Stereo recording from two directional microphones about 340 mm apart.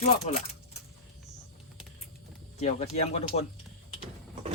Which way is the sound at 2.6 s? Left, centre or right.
Centre.